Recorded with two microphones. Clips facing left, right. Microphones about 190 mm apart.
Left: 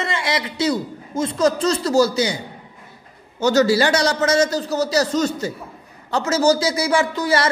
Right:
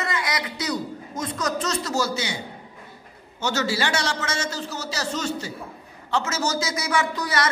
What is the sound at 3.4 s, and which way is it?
A man's voice, 40° left (ahead or behind).